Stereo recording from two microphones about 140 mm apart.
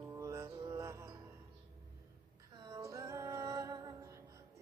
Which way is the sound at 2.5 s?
25° right (ahead or behind).